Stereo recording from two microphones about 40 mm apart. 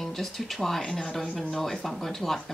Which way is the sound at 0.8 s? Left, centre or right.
Centre.